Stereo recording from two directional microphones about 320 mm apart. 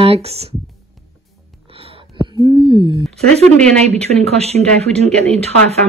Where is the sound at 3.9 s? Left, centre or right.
Centre.